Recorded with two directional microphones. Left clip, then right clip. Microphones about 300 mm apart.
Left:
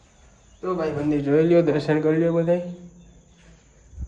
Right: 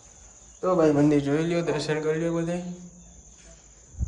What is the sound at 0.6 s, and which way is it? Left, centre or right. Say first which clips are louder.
A man's voice: right 5 dB; centre.